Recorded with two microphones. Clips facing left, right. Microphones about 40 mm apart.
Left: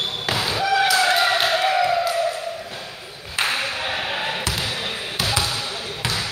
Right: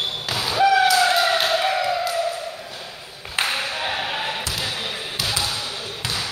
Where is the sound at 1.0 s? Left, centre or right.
Centre.